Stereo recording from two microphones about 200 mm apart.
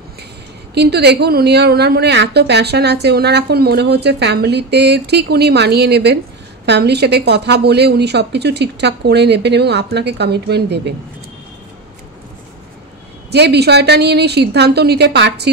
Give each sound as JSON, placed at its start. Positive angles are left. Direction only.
{"t": 0.7, "sound": "a woman's voice", "side_deg": -55}
{"t": 13.3, "sound": "a woman's voice", "side_deg": -55}